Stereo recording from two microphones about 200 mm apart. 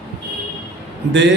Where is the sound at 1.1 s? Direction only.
65° right (ahead or behind).